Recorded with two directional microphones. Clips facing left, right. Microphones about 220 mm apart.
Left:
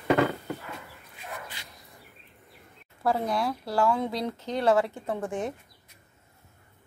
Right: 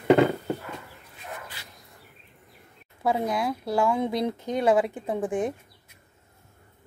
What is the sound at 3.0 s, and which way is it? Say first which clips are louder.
A woman's voice: right 1 dB; 15° right (ahead or behind).